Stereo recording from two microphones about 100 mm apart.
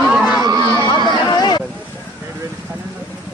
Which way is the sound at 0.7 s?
50° left (ahead or behind).